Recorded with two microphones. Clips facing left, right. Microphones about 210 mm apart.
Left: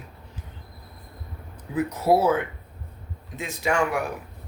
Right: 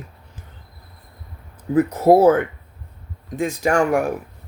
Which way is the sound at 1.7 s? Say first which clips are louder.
Right 7 dB; 50° right (ahead or behind).